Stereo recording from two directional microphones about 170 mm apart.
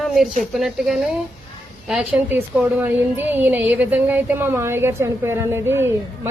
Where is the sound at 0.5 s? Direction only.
Centre (ahead or behind).